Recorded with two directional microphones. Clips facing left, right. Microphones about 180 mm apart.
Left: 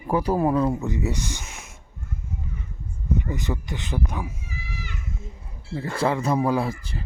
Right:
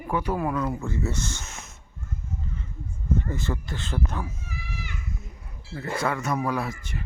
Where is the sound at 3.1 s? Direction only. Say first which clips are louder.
Left 1 dB; 15° left (ahead or behind).